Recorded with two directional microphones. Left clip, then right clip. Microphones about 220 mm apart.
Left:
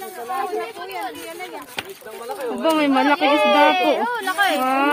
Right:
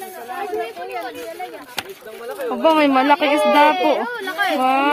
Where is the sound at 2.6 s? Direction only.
25° right (ahead or behind).